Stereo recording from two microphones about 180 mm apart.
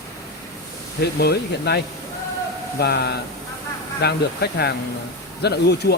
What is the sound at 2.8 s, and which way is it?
Speech, 65° left (ahead or behind).